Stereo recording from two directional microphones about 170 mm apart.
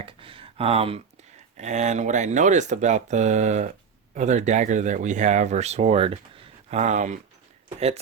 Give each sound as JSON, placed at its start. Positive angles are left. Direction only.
{"t": 0.0, "sound": "speech", "side_deg": -30}